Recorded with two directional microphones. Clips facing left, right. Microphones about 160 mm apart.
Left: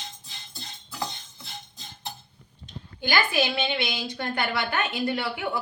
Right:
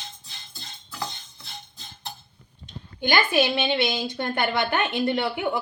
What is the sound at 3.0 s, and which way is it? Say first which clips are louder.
A woman's voice: right 3 dB; 20° right (ahead or behind).